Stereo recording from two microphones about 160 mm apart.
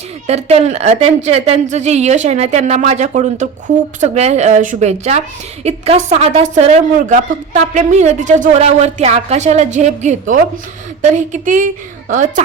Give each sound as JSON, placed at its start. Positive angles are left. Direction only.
{"t": 0.3, "sound": "a woman's voice", "side_deg": -40}